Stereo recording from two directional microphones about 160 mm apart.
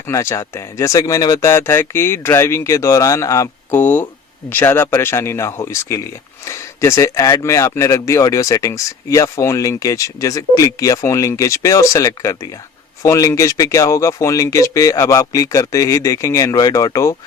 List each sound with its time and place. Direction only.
0.1 s speech: 20° left (ahead or behind)